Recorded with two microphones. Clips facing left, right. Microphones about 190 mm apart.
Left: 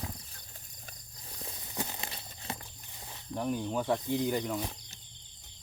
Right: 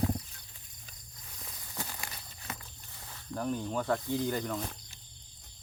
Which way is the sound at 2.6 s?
20° left (ahead or behind).